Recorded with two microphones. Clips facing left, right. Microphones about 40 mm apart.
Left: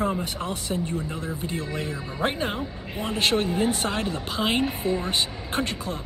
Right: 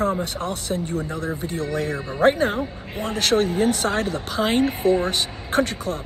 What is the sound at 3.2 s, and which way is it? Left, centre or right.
Speech, left.